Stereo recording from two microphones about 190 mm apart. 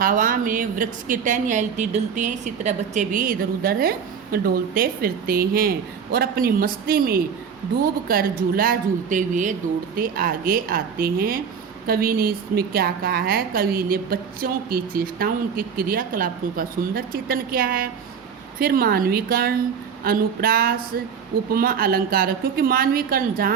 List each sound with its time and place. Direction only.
0.0 s a woman's voice: 45° right (ahead or behind)